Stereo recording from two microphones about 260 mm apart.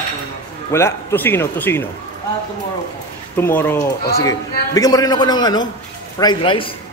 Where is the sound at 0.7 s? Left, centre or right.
Centre.